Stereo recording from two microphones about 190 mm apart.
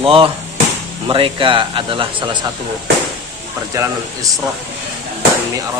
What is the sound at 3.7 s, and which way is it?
Speech, 15° right (ahead or behind).